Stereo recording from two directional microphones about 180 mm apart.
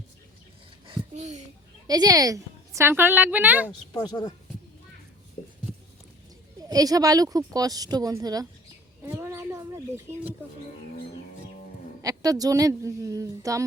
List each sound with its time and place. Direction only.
0.9 s a sound: 40° right (ahead or behind)
1.9 s a woman's voice: 20° right (ahead or behind)
3.9 s speech: 25° left (ahead or behind)
6.6 s a woman's voice: 20° right (ahead or behind)
9.0 s a sound: 10° right (ahead or behind)
12.0 s a woman's voice: 20° right (ahead or behind)